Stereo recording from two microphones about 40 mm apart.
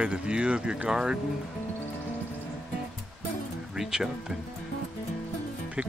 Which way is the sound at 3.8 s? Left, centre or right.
Centre.